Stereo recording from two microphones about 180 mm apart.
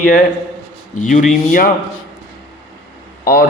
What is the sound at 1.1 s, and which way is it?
Speech, 45° left (ahead or behind).